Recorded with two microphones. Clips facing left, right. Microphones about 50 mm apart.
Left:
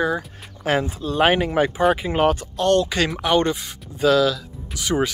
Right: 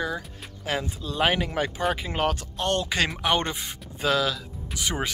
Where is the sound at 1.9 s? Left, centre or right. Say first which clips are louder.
Left 7 dB; left.